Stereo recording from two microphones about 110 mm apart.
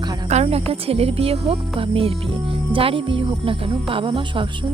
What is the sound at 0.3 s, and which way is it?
Speech, 75° right (ahead or behind).